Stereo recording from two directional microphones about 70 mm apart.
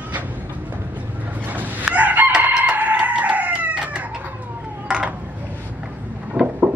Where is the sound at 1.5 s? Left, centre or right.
Right.